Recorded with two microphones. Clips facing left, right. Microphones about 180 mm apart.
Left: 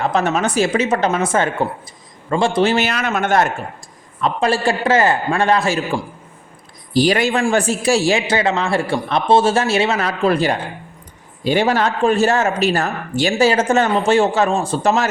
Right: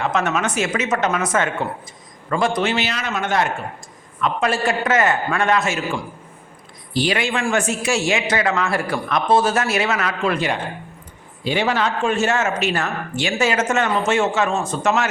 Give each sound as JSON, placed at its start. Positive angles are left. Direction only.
{"t": 0.0, "sound": "a man's voice", "side_deg": 35}
{"t": 2.7, "sound": "speech", "side_deg": 50}
{"t": 4.2, "sound": "speech", "side_deg": 30}